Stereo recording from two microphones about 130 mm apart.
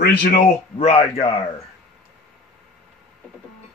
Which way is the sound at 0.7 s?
50° left (ahead or behind).